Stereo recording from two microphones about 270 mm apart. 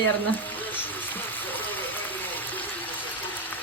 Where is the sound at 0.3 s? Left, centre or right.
Centre.